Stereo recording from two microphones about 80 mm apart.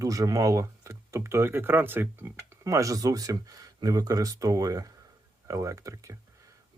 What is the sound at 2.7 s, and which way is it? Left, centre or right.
Speech, right.